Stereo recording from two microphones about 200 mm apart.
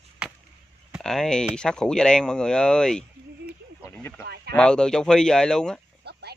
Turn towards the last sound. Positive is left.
turn(degrees=-55)  # may be behind; listen again after turning